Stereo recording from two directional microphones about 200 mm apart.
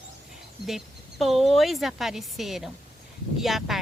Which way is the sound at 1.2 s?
Centre (ahead or behind).